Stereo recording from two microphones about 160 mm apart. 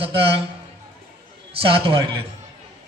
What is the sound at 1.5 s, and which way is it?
Speech, 35° right (ahead or behind).